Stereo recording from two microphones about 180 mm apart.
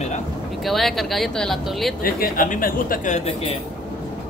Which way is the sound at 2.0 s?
50° left (ahead or behind).